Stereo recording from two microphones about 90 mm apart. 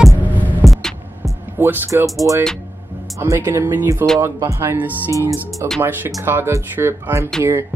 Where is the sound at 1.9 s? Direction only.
35° right (ahead or behind).